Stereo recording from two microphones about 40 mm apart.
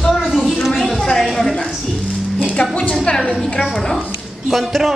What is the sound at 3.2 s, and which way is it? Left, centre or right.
Speech, centre.